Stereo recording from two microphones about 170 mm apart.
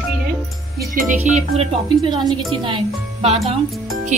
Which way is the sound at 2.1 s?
25° right (ahead or behind).